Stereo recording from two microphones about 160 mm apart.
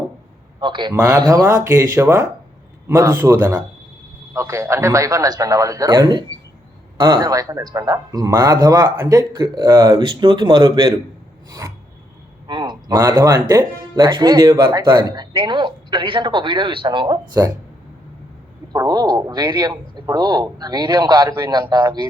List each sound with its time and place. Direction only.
0.6 s a man's voice: 30° right (ahead or behind)
0.9 s a man's voice: 20° right (ahead or behind)
17.4 s a man's voice: 20° right (ahead or behind)
18.7 s a man's voice: 25° right (ahead or behind)